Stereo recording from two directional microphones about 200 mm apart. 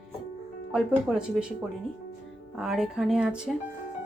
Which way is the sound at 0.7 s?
5° right (ahead or behind).